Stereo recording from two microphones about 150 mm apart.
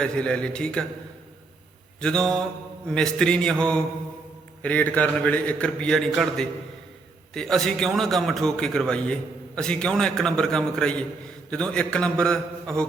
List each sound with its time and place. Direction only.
0.0 s a man's voice: 5° left (ahead or behind)
2.0 s a man's voice: 5° left (ahead or behind)